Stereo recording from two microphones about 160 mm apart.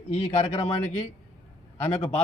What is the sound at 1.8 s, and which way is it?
Speech, 40° left (ahead or behind).